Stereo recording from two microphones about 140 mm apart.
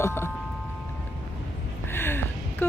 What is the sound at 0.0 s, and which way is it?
Chime, 15° left (ahead or behind).